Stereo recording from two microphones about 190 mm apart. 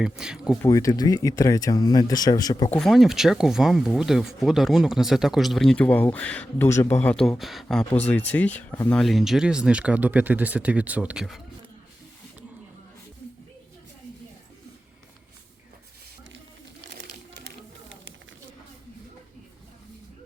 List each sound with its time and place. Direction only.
0.0 s speech: 5° right (ahead or behind)
0.6 s speech: 15° left (ahead or behind)
2.6 s speech: centre (ahead or behind)